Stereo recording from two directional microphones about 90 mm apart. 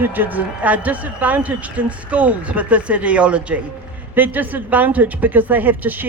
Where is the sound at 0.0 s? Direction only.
20° right (ahead or behind).